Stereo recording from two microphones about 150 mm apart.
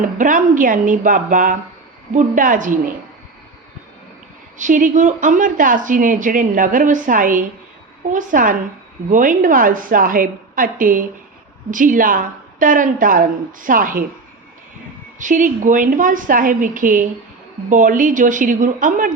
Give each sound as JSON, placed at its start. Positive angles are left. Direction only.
{"t": 0.0, "sound": "a woman's voice", "side_deg": -60}
{"t": 4.5, "sound": "a woman's voice", "side_deg": -60}
{"t": 15.2, "sound": "a woman's voice", "side_deg": -60}